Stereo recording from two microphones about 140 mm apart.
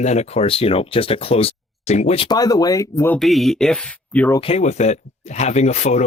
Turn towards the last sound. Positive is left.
turn(degrees=55)  # may be behind; listen again after turning